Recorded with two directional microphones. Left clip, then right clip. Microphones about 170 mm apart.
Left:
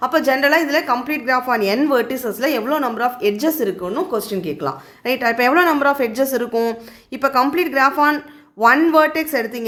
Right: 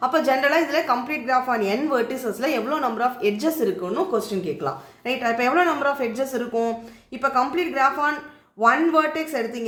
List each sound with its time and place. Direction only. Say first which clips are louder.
0.0 s a woman's voice: left 4 dB; 25° left (ahead or behind)